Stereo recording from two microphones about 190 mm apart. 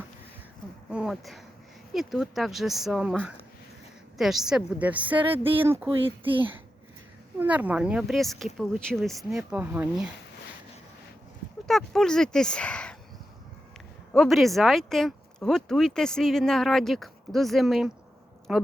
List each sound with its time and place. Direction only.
0.9 s a woman's voice: 5° right (ahead or behind)
6.2 s a child's voice: 25° right (ahead or behind)
7.3 s speech: 10° right (ahead or behind)
11.7 s speech: 5° left (ahead or behind)
14.1 s speech: centre (ahead or behind)